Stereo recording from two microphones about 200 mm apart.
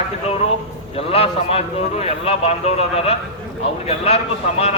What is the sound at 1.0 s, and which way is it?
A man's voice, 30° left (ahead or behind).